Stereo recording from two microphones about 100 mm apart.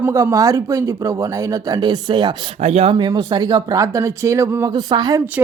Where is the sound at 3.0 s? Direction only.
45° right (ahead or behind); by 4.7 s 25° right (ahead or behind).